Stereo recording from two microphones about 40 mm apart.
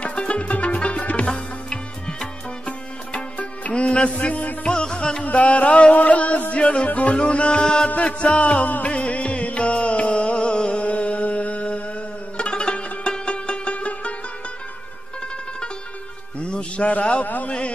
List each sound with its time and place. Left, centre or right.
0.0 s music: left
4.6 s music: left
5.2 s music: left
10.8 s a sound: left
12.4 s music: left
16.4 s a sound: left
17.5 s music: left